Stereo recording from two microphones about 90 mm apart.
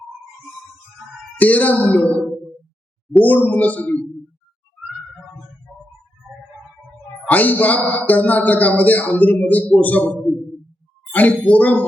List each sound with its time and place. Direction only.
1.4 s a man's voice: 15° left (ahead or behind)
7.3 s a man's voice: 20° left (ahead or behind)